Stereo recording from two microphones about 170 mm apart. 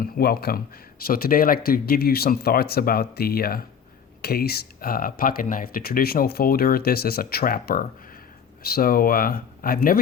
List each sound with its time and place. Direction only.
0.0 s speech: 65° left (ahead or behind)